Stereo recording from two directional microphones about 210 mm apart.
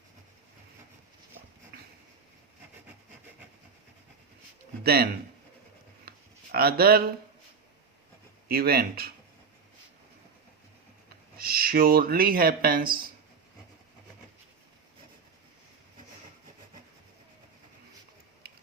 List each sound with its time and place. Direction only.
4.8 s speech: 50° right (ahead or behind)
6.1 s a sound: 45° right (ahead or behind)
8.4 s speech: 45° right (ahead or behind)
11.3 s speech: 45° right (ahead or behind)